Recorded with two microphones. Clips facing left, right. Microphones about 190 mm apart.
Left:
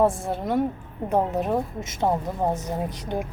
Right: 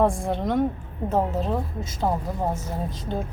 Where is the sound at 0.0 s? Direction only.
Centre (ahead or behind).